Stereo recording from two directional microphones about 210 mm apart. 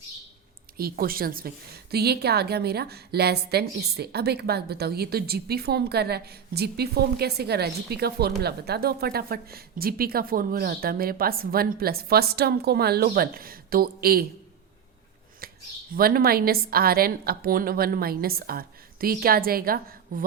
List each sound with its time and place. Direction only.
0.8 s a woman's voice: 45° right (ahead or behind)
15.4 s a sound: 45° right (ahead or behind)
15.9 s a woman's voice: 45° right (ahead or behind)